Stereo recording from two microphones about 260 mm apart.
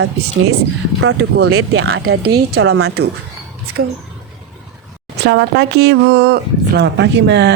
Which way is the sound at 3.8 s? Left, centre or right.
Right.